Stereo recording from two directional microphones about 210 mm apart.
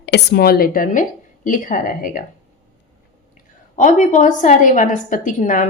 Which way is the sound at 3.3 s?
35° left (ahead or behind).